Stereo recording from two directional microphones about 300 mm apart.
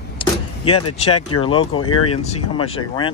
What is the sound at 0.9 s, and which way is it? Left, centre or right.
Speech, centre.